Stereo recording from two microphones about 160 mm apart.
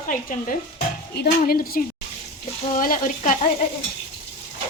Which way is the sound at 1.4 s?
65° left (ahead or behind).